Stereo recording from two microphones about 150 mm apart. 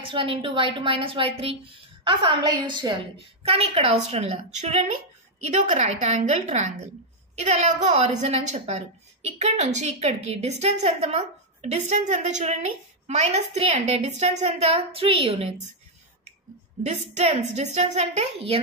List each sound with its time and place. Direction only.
0.0 s a woman's voice: 35° right (ahead or behind)
16.8 s a woman's voice: 50° right (ahead or behind)